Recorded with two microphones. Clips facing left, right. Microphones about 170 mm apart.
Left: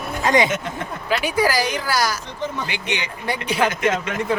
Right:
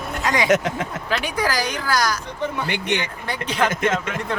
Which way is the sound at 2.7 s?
55° right (ahead or behind).